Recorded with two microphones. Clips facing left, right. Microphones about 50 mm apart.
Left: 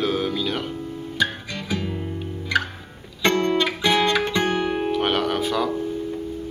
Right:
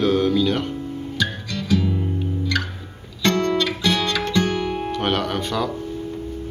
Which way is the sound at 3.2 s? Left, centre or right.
Centre.